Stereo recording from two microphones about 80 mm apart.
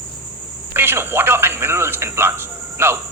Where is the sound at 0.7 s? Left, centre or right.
Right.